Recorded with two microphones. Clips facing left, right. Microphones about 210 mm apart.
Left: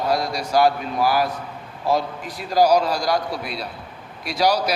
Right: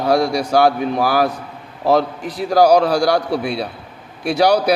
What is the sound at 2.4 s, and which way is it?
A man's voice, 70° right (ahead or behind).